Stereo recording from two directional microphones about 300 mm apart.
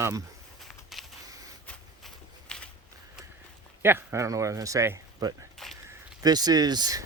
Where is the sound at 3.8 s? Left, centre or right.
Centre.